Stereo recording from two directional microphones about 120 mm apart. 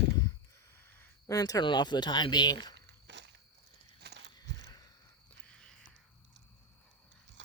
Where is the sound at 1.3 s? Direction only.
30° left (ahead or behind).